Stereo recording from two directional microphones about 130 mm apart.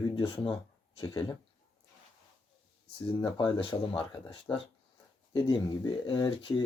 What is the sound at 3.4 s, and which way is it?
Speech, 35° left (ahead or behind).